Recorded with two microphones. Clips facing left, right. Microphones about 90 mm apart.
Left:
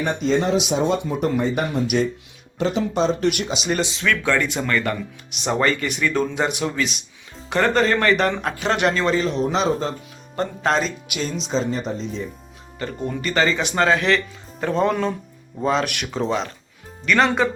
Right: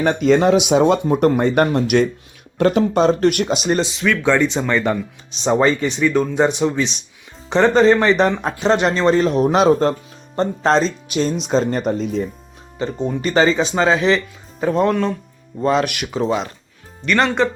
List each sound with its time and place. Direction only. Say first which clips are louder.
0.0 s speech: right 6 dB; 75° right (ahead or behind)
1.0 s speech: right 6 dB; 50° right (ahead or behind); by 2.0 s 70° right (ahead or behind)
2.6 s speech: right 6 dB; 60° right (ahead or behind); by 3.8 s 40° right (ahead or behind)
4.0 s speech: right 5 dB; 20° right (ahead or behind)
9.0 s speech: right 6 dB; 50° right (ahead or behind)
10.3 s speech: right 5 dB; 30° right (ahead or behind)
11.4 s speech: right 5 dB; 55° right (ahead or behind)
12.8 s speech: right 5 dB; 20° right (ahead or behind)
13.7 s speech: even; 15° right (ahead or behind)
14.6 s speech: right 3 dB; 5° right (ahead or behind)